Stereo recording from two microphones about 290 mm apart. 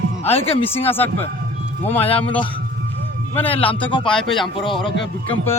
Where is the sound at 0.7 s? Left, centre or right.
Centre.